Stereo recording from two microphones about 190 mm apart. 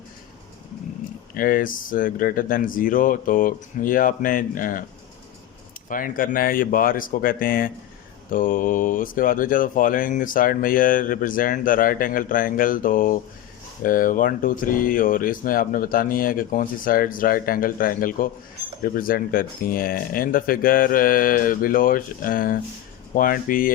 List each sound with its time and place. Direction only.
1.3 s speech: 50° left (ahead or behind)
5.9 s speech: 45° left (ahead or behind)